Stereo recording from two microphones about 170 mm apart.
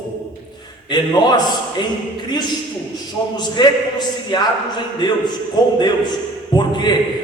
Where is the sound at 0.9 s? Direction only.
25° left (ahead or behind).